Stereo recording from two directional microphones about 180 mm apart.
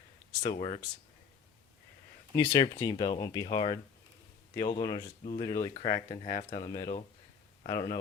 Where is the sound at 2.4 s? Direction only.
25° left (ahead or behind).